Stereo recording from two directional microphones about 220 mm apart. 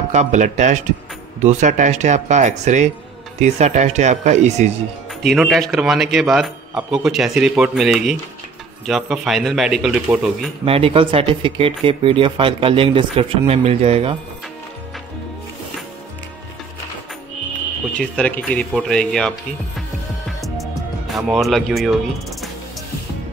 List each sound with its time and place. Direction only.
0.1 s speech: 35° right (ahead or behind)
5.2 s speech: centre (ahead or behind)
10.6 s speech: 25° right (ahead or behind)
17.9 s speech: 5° left (ahead or behind)
20.2 s music: centre (ahead or behind)
21.1 s speech: centre (ahead or behind)